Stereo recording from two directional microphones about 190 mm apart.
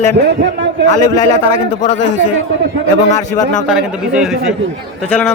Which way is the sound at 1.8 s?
40° left (ahead or behind).